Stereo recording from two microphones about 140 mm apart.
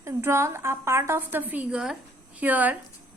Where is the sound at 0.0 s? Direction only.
20° right (ahead or behind).